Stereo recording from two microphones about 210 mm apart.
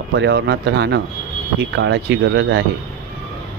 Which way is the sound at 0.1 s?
55° right (ahead or behind).